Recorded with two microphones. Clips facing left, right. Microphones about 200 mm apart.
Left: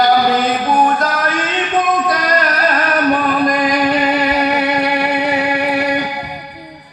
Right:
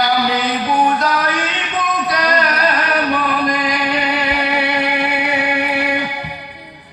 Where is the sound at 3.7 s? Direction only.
45° left (ahead or behind).